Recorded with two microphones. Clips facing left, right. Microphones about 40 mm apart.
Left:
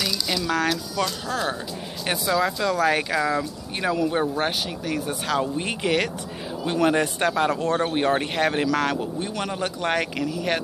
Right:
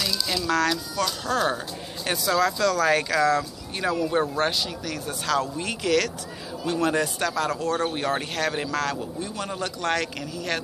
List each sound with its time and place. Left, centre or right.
0.0 s speech: left
1.2 s speech: centre
2.0 s speech: centre
4.5 s speech: left
5.6 s speech: left
10.1 s speech: left